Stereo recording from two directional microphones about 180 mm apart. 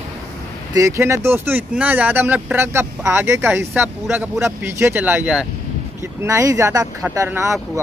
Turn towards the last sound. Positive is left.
turn(degrees=-15)  # may be behind; listen again after turning